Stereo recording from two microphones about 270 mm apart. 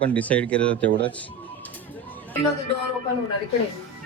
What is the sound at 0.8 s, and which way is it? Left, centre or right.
Speech, right.